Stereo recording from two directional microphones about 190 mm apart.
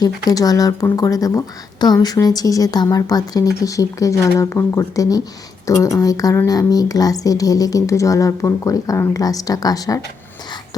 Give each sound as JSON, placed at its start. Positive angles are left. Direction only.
{"t": 0.0, "sound": "speech", "side_deg": 20}